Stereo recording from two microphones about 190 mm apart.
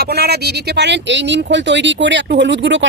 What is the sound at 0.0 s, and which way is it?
Speech, 55° right (ahead or behind).